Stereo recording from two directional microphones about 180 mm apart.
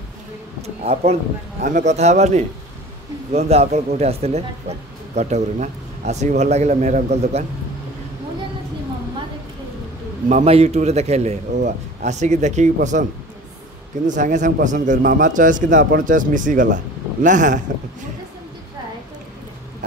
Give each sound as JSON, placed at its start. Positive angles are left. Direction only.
{"t": 0.6, "sound": "speech", "side_deg": -35}
{"t": 10.2, "sound": "speech", "side_deg": -40}
{"t": 14.0, "sound": "a man's voice", "side_deg": -45}